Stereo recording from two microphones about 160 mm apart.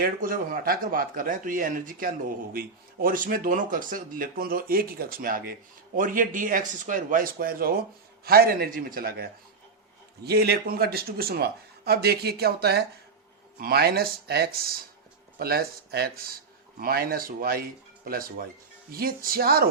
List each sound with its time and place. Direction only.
0.0 s speech: 60° right (ahead or behind)
10.2 s speech: 90° right; by 19.6 s 70° right (ahead or behind)